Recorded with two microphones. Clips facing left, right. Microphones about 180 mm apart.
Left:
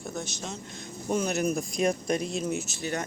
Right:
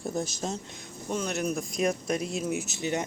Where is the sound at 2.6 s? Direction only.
20° right (ahead or behind).